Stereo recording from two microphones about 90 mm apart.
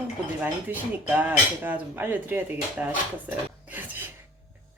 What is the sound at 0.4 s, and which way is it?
Speech, 20° right (ahead or behind).